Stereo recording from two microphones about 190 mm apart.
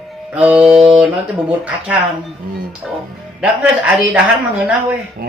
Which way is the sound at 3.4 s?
5° right (ahead or behind).